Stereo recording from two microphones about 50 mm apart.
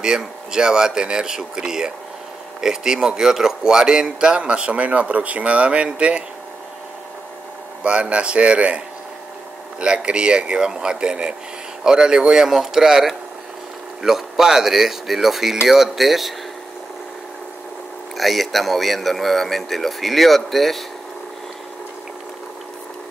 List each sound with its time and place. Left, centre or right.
0.0 s a man's voice: centre
7.8 s a man's voice: right; by 16.3 s centre
18.1 s a man's voice: centre